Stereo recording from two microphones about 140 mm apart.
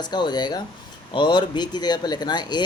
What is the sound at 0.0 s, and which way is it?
Speech, 30° left (ahead or behind).